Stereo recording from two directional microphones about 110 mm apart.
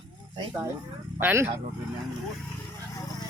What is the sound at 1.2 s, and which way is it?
Speech, 20° right (ahead or behind).